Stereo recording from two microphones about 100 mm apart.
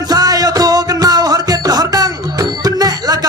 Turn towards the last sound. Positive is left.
turn(degrees=-40)  # may be behind; listen again after turning